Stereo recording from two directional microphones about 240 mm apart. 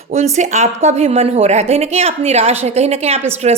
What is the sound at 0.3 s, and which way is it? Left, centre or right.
Speech, right.